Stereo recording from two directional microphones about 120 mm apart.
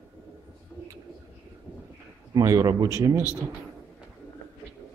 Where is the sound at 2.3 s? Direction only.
30° right (ahead or behind).